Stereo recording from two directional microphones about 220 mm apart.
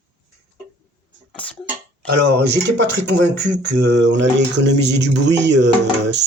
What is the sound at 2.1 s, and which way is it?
Speech, 50° right (ahead or behind).